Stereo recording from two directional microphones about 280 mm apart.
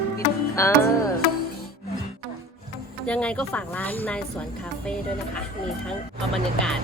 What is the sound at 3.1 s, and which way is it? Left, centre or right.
Speech, centre.